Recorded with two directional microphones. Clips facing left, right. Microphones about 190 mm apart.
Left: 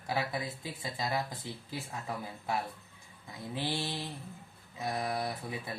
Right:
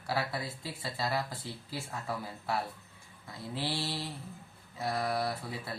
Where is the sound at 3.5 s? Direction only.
20° left (ahead or behind).